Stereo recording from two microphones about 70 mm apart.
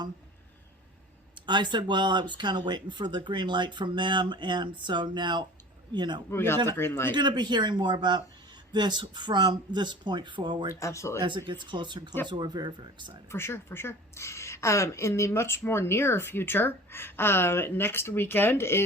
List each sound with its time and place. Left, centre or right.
1.5 s speech: right
6.3 s speech: left
7.1 s speech: right
10.8 s speech: left
11.2 s speech: right
13.3 s speech: left